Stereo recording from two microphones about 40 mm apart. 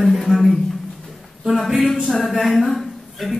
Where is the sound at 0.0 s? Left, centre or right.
Centre.